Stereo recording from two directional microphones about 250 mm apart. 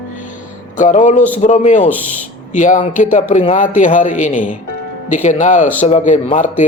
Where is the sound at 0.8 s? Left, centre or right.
Left.